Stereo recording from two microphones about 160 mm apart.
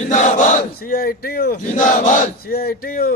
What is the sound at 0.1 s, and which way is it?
Battle cry, 50° left (ahead or behind).